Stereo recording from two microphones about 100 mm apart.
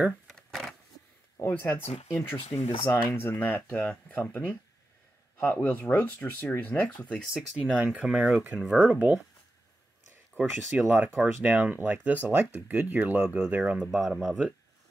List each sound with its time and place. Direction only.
0.3 s a sound: centre (ahead or behind)
1.4 s speech: 20° left (ahead or behind)
2.5 s speech: 70° left (ahead or behind)
2.9 s speech: 20° left (ahead or behind)
7.3 s speech: 5° right (ahead or behind)
10.9 s speech: 25° right (ahead or behind); by 14.4 s 5° right (ahead or behind)